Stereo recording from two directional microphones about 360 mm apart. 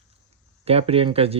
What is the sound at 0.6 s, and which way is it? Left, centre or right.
Speech, centre.